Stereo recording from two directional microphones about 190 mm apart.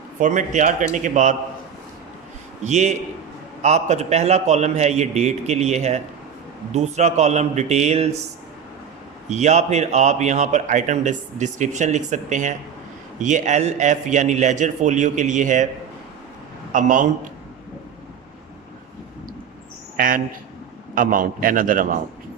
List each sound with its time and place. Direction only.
0.2 s speech: 40° right (ahead or behind)
2.6 s speech: 35° right (ahead or behind)
9.3 s speech: 35° right (ahead or behind)
16.7 s speech: 40° right (ahead or behind)
20.0 s a man's voice: 45° right (ahead or behind)